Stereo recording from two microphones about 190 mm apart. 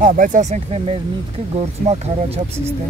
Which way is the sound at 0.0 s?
45° right (ahead or behind).